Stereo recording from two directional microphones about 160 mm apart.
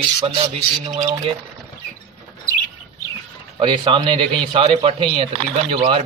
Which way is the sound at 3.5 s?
30° right (ahead or behind).